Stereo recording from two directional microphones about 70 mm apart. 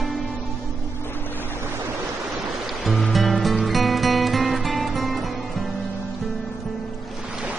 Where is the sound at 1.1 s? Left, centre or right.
Left.